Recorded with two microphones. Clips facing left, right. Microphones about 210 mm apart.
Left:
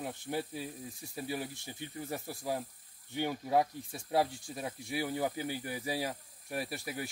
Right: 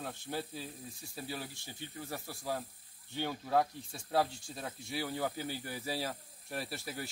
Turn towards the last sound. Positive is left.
turn(degrees=15)  # may be behind; listen again after turning